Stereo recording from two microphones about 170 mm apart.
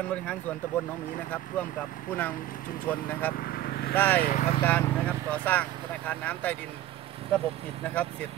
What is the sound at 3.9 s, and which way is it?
Speech, 10° left (ahead or behind).